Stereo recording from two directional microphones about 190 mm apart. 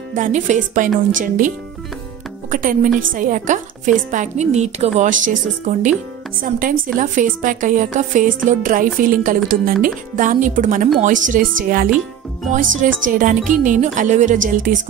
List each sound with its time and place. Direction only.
0.1 s speech: 40° right (ahead or behind)
1.1 s music: 45° right (ahead or behind)
2.5 s music: 45° right (ahead or behind)
4.1 s speech: 40° right (ahead or behind)
6.4 s music: 45° right (ahead or behind)
12.4 s speech: 45° right (ahead or behind)